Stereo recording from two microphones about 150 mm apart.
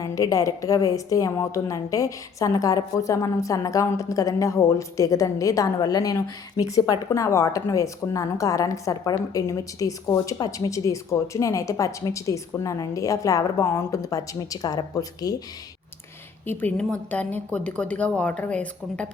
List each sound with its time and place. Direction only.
0.0 s a woman's voice: 20° left (ahead or behind)
16.5 s a woman's voice: 10° left (ahead or behind)